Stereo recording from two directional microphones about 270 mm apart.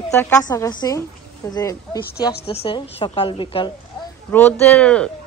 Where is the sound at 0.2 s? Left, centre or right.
Centre.